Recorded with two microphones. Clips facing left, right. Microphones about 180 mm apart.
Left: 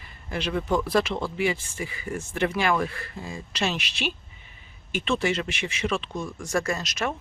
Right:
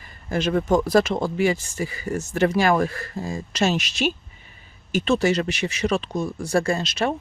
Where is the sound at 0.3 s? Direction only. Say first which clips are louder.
Right 6 dB; 45° right (ahead or behind).